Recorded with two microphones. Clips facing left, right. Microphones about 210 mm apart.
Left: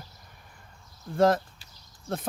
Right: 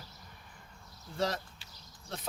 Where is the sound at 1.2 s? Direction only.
50° left (ahead or behind).